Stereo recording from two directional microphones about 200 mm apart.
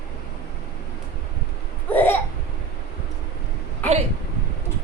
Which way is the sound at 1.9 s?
10° left (ahead or behind).